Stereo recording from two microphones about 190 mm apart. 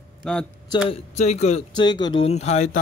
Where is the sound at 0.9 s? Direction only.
35° left (ahead or behind).